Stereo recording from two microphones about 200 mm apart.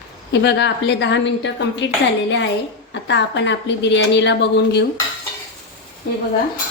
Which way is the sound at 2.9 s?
60° left (ahead or behind).